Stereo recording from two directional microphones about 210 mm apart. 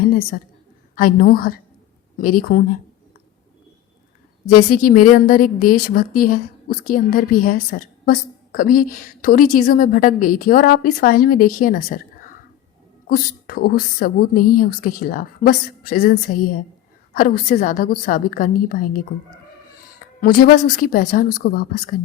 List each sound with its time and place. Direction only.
0.0 s a sound: 45° left (ahead or behind)
0.9 s a woman's voice: 45° left (ahead or behind)
4.9 s a woman's voice: 40° left (ahead or behind)
20.2 s a woman's voice: 45° left (ahead or behind)